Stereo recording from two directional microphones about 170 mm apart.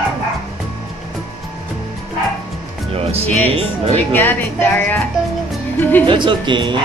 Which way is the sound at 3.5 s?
35° right (ahead or behind).